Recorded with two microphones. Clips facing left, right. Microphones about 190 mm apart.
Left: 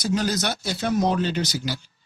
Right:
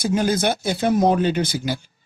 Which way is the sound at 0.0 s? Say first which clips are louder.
Right 4 dB; 55° right (ahead or behind).